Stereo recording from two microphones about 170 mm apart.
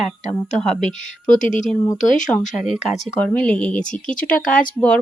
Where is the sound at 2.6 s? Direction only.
Centre (ahead or behind).